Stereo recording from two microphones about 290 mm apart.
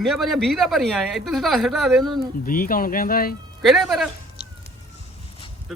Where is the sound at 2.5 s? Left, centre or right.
Left.